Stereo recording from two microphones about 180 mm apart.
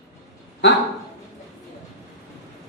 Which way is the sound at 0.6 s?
80° left.